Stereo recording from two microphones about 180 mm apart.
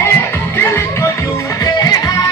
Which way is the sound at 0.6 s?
15° left (ahead or behind).